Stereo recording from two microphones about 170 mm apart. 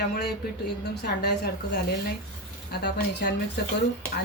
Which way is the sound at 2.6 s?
75° left (ahead or behind).